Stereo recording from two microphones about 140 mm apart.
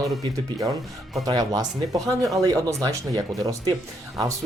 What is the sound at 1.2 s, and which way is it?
Speech, 30° right (ahead or behind).